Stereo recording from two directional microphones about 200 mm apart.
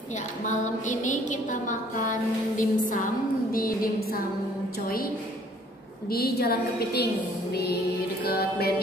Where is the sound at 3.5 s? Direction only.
45° left (ahead or behind).